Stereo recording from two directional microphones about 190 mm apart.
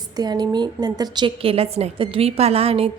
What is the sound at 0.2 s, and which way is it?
A woman's voice, 20° right (ahead or behind).